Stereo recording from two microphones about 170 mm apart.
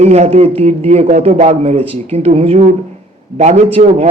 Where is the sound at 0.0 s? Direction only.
40° right (ahead or behind).